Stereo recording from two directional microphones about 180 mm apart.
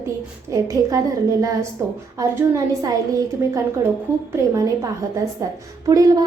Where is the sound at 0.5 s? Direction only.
15° right (ahead or behind).